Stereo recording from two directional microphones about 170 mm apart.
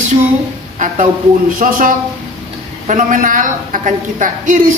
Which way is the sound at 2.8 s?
50° right (ahead or behind).